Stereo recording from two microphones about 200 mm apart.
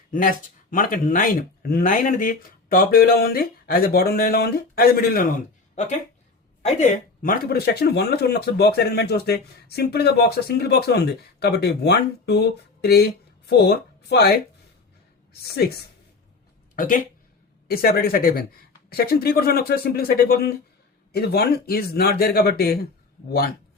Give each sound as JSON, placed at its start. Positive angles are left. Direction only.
{"t": 0.1, "sound": "speech", "side_deg": 45}
{"t": 6.7, "sound": "speech", "side_deg": 35}
{"t": 16.7, "sound": "speech", "side_deg": 40}